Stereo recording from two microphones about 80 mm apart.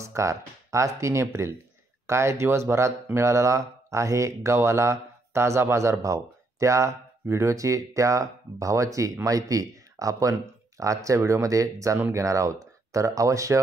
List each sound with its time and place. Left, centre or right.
0.0 s speech: right